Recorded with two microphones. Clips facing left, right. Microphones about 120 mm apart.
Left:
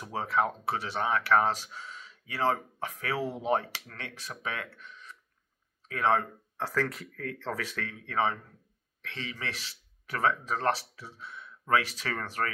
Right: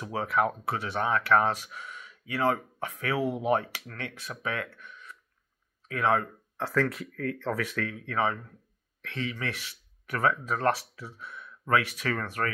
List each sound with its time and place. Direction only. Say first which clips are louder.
0.0 s speech: right 2 dB; 30° left (ahead or behind)
4.7 s a sound: right 1 dB; 25° left (ahead or behind)
5.9 s speech: right 1 dB; 30° left (ahead or behind)